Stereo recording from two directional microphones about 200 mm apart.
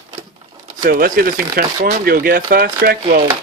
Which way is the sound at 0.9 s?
45° right (ahead or behind).